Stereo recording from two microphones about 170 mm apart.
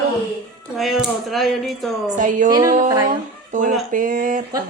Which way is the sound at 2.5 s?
20° right (ahead or behind).